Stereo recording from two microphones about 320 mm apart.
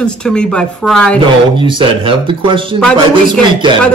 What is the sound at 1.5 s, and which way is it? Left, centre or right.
Speech, centre.